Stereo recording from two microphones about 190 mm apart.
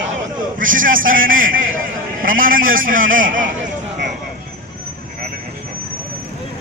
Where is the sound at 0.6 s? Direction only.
45° right (ahead or behind).